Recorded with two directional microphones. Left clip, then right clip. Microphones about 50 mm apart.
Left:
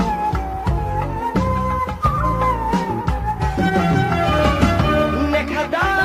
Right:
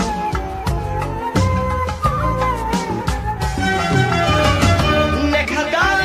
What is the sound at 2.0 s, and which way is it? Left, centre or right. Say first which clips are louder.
Music: even; right.